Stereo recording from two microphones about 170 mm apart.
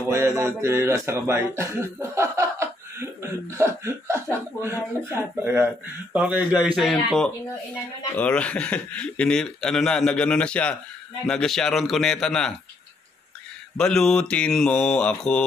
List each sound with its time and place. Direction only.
0.1 s speech: 15° right (ahead or behind); by 10.8 s 5° left (ahead or behind)
11.2 s mantra: 5° left (ahead or behind)
13.7 s mantra: 5° left (ahead or behind)